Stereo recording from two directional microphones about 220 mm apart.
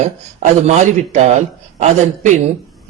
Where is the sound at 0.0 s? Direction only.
30° right (ahead or behind).